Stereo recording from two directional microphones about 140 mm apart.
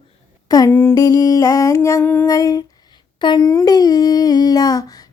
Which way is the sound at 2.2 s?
25° left (ahead or behind).